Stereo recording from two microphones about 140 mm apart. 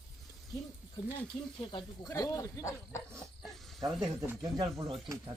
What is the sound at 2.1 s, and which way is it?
Speech, 25° left (ahead or behind).